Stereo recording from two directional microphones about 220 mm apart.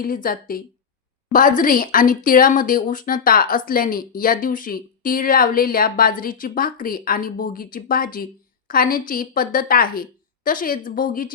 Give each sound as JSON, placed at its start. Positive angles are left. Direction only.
{"t": 0.0, "sound": "speech", "side_deg": 40}